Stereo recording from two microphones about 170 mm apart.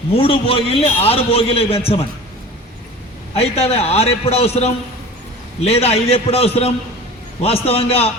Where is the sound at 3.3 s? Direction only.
35° left (ahead or behind).